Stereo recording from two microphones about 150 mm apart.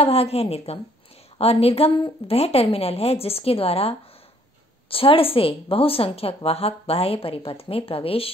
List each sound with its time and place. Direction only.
0.0 s a woman's voice: 40° left (ahead or behind)